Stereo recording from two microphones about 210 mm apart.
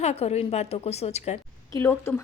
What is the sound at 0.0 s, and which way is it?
A woman's voice, 30° left (ahead or behind).